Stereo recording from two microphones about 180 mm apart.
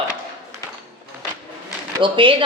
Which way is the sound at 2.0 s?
25° right (ahead or behind).